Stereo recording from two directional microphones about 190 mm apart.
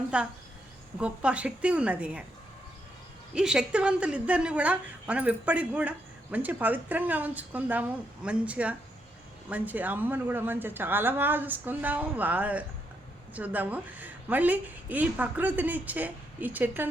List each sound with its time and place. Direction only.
0.1 s a woman's voice: 5° right (ahead or behind)
3.3 s a woman's voice: 5° right (ahead or behind)